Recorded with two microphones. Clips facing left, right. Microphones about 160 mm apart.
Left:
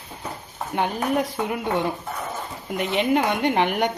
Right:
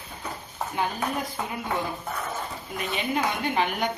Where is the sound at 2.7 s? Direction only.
80° left.